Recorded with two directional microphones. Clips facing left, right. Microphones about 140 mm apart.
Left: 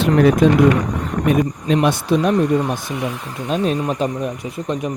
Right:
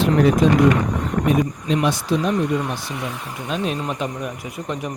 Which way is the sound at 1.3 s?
55° left (ahead or behind).